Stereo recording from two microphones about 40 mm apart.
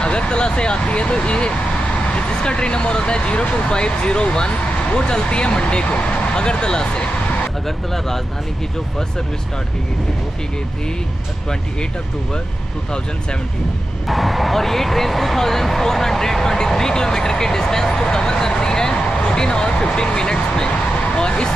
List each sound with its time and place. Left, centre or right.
0.0 s speech: left
14.0 s speech: centre; by 21.5 s left